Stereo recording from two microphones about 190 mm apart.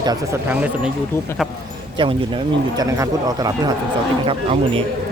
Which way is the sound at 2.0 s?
25° right (ahead or behind).